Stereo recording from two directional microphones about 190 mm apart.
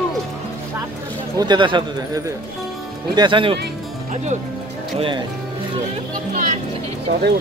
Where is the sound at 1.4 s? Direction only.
25° right (ahead or behind).